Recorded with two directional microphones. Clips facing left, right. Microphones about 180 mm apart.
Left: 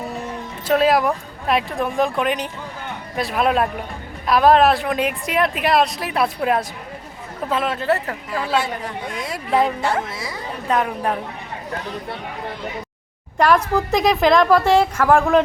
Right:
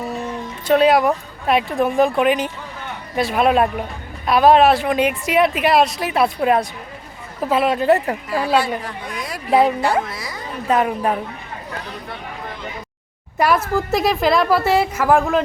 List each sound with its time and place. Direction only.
0.7 s a woman's voice: centre (ahead or behind)
7.5 s a woman's voice: 10° right (ahead or behind)
8.5 s speech: 25° left (ahead or behind)
9.5 s a woman's voice: 10° right (ahead or behind)
9.8 s speech: 25° left (ahead or behind)
10.7 s a woman's voice: 5° right (ahead or behind)
13.4 s a woman's voice: 5° right (ahead or behind)